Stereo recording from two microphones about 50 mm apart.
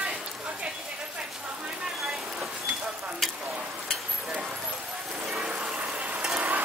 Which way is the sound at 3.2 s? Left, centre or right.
Centre.